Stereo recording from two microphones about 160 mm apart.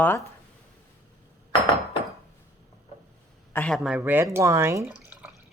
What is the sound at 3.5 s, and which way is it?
Speech, 10° left (ahead or behind).